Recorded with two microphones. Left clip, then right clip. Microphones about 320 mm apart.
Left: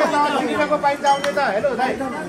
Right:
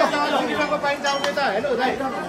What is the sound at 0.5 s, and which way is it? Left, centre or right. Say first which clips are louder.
Speech: left 3 dB; centre.